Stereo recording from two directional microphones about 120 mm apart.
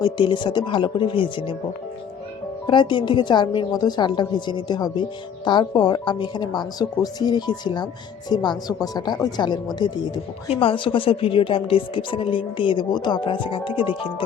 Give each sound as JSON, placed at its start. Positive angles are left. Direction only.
{"t": 0.0, "sound": "a woman's voice", "side_deg": 40}
{"t": 2.6, "sound": "a woman's voice", "side_deg": 40}
{"t": 10.6, "sound": "speech", "side_deg": 45}